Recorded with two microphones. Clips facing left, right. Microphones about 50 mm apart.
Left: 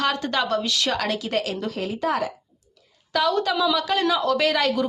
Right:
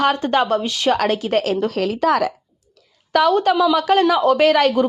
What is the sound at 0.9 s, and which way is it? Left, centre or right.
Speech, right.